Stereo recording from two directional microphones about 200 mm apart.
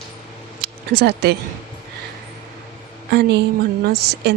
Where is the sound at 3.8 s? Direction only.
50° right (ahead or behind).